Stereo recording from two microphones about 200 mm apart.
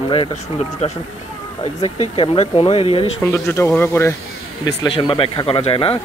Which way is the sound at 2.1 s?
30° left (ahead or behind).